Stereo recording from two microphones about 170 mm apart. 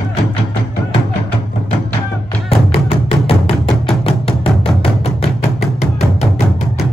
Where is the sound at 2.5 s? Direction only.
35° left (ahead or behind).